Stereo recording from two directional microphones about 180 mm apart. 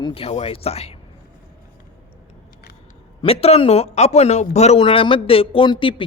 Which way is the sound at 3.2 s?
35° left (ahead or behind).